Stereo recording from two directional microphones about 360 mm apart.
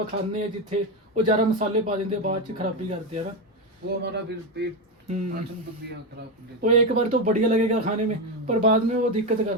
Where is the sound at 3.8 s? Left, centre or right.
Right.